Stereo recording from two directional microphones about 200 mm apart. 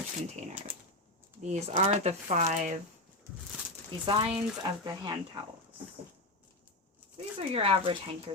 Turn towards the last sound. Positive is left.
turn(degrees=-30)  # may be behind; listen again after turning